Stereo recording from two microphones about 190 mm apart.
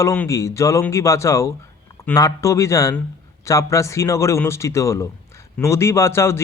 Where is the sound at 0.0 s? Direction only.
15° left (ahead or behind).